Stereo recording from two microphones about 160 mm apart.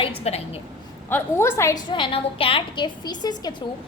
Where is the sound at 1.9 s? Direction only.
30° left (ahead or behind).